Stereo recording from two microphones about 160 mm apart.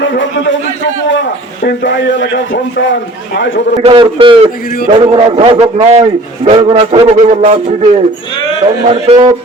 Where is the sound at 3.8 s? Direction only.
35° right (ahead or behind).